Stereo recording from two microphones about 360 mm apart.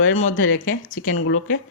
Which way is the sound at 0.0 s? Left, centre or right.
Left.